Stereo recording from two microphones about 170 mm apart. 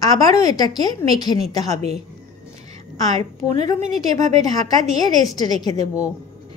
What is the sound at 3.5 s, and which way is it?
A woman's voice, 45° right (ahead or behind).